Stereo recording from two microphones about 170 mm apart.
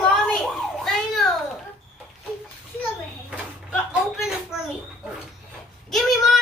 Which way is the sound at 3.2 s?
5° right (ahead or behind).